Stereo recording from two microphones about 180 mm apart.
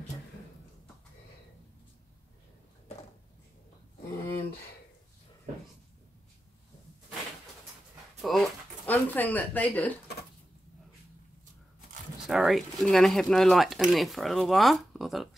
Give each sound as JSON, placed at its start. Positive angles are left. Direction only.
{"t": 4.3, "sound": "a sound", "side_deg": 60}
{"t": 8.2, "sound": "speech", "side_deg": 0}
{"t": 12.3, "sound": "speech", "side_deg": 0}